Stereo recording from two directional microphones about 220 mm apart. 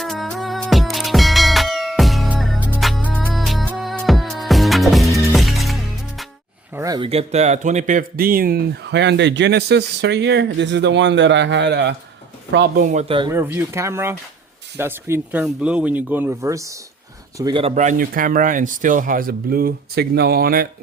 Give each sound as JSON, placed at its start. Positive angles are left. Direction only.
{"t": 0.0, "sound": "music", "side_deg": 0}
{"t": 6.7, "sound": "speech", "side_deg": -15}
{"t": 12.8, "sound": "speech", "side_deg": -30}
{"t": 13.3, "sound": "speech", "side_deg": -10}